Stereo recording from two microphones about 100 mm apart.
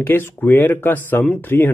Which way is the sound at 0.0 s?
20° left (ahead or behind).